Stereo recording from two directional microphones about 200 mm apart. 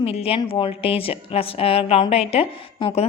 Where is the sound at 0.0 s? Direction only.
30° left (ahead or behind).